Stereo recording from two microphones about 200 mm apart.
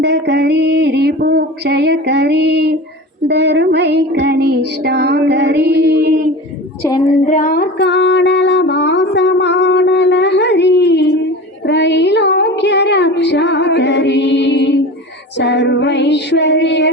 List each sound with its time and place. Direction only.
0.0 s child singing: 55° right (ahead or behind)
7.3 s female singing: 45° left (ahead or behind); by 11.1 s 60° left (ahead or behind)
11.6 s child singing: 60° left (ahead or behind)
15.4 s music: 60° left (ahead or behind)